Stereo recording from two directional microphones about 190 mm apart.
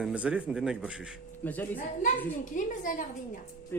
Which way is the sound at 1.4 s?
10° left (ahead or behind).